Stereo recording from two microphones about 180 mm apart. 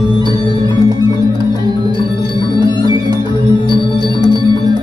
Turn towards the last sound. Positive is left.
turn(degrees=-20)  # may be behind; listen again after turning